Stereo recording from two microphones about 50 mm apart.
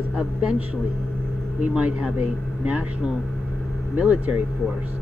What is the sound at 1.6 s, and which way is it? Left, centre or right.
Speech, right.